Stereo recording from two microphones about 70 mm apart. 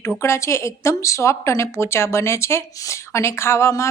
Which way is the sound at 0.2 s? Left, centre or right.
Left.